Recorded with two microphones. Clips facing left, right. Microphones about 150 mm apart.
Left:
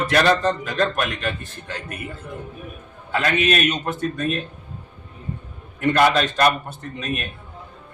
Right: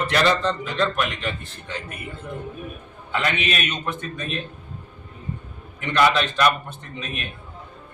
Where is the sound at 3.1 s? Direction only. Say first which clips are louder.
Left 4 dB; 45° left (ahead or behind).